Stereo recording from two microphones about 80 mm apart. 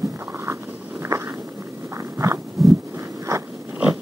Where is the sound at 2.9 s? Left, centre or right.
Right.